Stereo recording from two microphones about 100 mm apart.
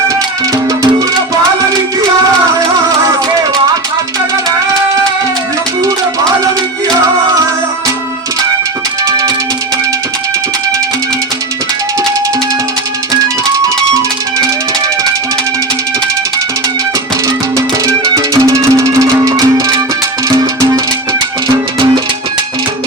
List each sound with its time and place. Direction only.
0.1 s music: 35° right (ahead or behind)
17.8 s music: 35° right (ahead or behind)